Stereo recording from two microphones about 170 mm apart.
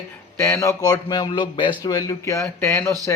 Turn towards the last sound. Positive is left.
turn(degrees=15)  # may be behind; listen again after turning